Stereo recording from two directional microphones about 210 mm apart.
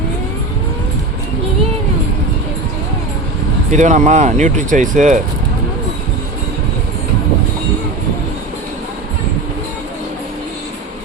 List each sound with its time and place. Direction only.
3.7 s speech: 35° right (ahead or behind)